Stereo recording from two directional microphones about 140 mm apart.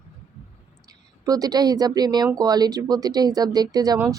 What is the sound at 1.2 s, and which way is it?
Speech, 25° right (ahead or behind).